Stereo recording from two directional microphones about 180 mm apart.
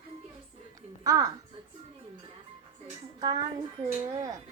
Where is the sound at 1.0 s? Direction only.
20° right (ahead or behind).